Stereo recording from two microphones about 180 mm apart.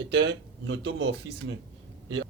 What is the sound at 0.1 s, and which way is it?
Speech, 80° right.